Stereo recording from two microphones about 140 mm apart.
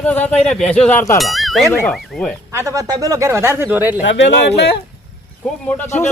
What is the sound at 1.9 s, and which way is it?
Speech, 5° left (ahead or behind).